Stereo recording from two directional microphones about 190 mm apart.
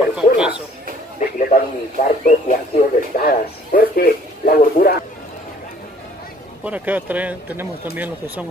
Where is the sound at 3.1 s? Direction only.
50° left (ahead or behind).